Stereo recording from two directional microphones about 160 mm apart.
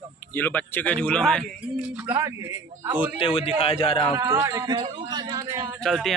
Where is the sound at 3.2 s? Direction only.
35° left (ahead or behind).